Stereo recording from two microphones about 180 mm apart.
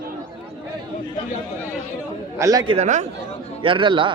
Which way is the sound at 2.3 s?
20° right (ahead or behind).